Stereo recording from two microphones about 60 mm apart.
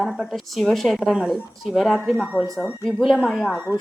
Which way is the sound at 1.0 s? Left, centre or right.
Centre.